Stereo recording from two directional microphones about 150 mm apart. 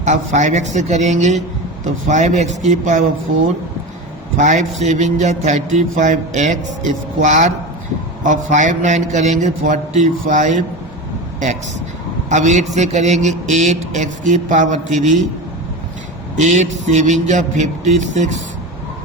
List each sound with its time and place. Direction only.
0.0 s speech: 55° right (ahead or behind)
4.4 s speech: 55° right (ahead or behind)
12.3 s speech: 50° right (ahead or behind)
16.4 s speech: 50° right (ahead or behind)